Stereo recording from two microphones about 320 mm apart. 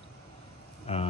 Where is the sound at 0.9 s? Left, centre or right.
Centre.